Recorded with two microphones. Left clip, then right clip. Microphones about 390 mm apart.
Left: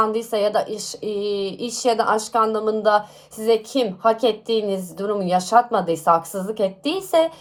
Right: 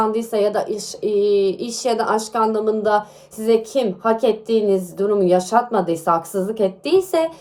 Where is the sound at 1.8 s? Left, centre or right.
Centre.